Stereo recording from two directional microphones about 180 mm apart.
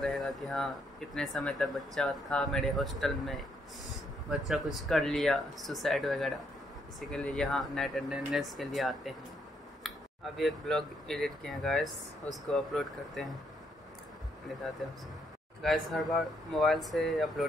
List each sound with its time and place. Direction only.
0.0 s speech: centre (ahead or behind)
15.6 s speech: centre (ahead or behind)